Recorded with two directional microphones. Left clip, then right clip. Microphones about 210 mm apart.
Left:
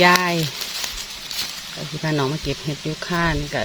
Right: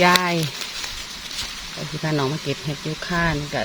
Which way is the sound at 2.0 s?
20° left (ahead or behind).